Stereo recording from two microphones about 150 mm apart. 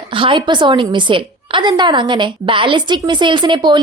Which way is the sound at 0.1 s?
35° right (ahead or behind).